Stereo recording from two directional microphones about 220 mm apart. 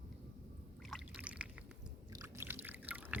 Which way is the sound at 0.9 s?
5° right (ahead or behind).